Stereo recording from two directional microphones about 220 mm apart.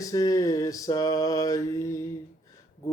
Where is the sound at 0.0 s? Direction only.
15° left (ahead or behind).